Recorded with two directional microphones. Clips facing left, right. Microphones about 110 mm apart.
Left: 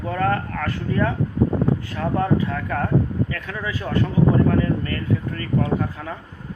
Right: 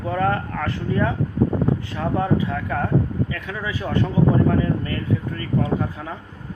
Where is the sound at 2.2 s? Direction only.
15° right (ahead or behind).